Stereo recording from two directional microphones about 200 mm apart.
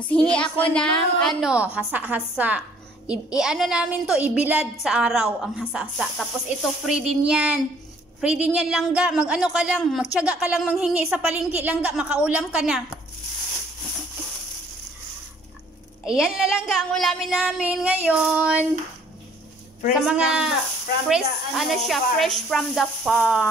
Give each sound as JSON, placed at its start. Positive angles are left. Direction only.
{"t": 0.1, "sound": "a woman's voice", "side_deg": 5}
{"t": 16.1, "sound": "speech", "side_deg": -5}
{"t": 20.1, "sound": "speech", "side_deg": -5}